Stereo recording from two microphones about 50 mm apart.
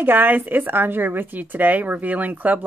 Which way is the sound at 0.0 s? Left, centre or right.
Right.